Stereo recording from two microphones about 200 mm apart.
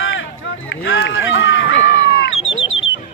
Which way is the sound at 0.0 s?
70° left (ahead or behind).